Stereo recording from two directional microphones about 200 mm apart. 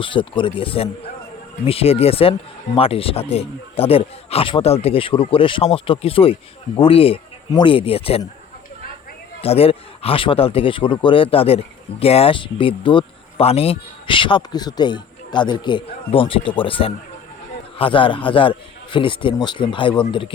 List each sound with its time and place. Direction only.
0.0 s speech: 25° left (ahead or behind)
9.4 s speech: 30° left (ahead or behind)